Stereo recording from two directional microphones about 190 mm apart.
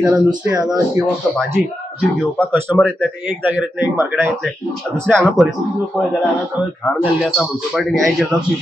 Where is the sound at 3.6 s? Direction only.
10° right (ahead or behind).